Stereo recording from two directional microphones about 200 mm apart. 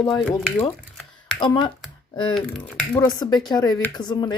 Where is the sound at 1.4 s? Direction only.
25° left (ahead or behind).